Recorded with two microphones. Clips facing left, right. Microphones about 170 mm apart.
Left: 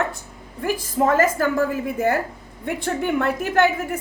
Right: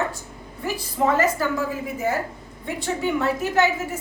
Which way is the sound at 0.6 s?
50° left (ahead or behind).